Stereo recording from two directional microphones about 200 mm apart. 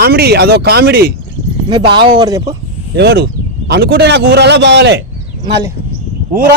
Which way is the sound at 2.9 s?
60° right (ahead or behind).